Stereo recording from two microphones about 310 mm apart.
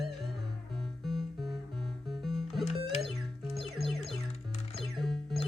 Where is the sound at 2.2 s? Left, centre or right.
Centre.